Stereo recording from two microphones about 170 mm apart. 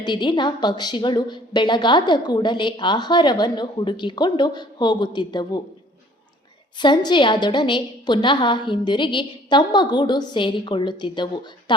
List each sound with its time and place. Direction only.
0.0 s a woman's voice: 25° left (ahead or behind)
6.7 s a woman's voice: 25° left (ahead or behind)